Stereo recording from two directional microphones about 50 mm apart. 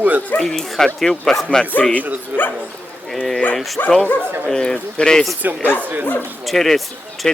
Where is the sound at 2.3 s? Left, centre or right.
Right.